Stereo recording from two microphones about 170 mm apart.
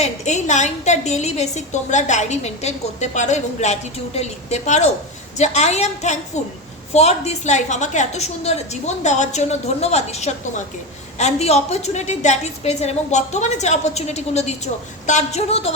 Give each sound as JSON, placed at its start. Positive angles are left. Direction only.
{"t": 0.0, "sound": "a woman's voice", "side_deg": 45}